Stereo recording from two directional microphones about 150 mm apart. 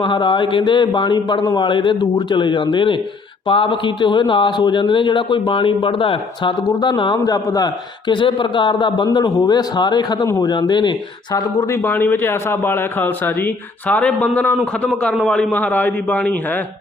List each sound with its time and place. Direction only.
0.0 s speech: 30° left (ahead or behind)
11.3 s a man's voice: 15° left (ahead or behind)